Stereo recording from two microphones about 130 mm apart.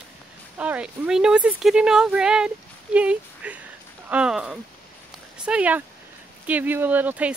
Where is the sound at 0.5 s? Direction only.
10° right (ahead or behind).